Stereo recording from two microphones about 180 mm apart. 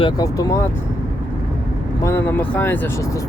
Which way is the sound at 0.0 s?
20° left (ahead or behind).